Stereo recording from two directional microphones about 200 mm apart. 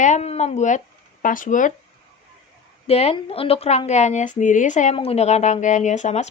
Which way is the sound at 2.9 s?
30° left (ahead or behind).